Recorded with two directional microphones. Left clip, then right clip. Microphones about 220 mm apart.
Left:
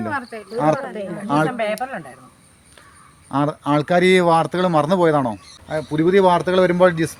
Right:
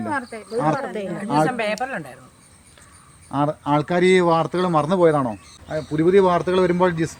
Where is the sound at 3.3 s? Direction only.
50° left (ahead or behind).